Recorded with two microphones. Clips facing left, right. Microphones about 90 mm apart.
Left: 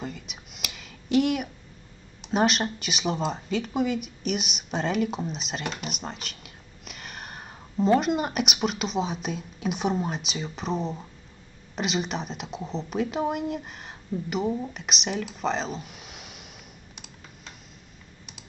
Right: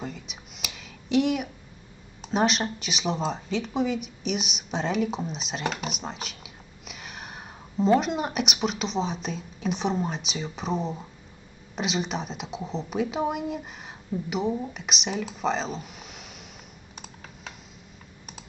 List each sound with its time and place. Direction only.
0.0 s a sound: centre (ahead or behind)
2.3 s speech: centre (ahead or behind)
5.6 s speech: 45° right (ahead or behind)
5.9 s speech: centre (ahead or behind)